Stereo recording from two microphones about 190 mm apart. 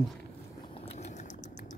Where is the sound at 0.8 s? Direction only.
35° left (ahead or behind).